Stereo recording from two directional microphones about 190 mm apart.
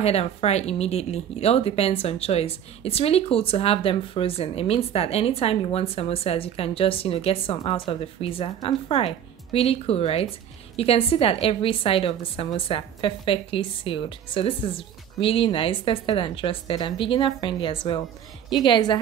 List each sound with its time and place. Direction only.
0.0 s a woman's voice: 35° left (ahead or behind)